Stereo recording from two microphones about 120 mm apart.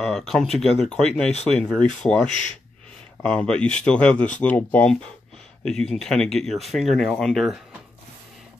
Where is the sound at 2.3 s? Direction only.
90° left.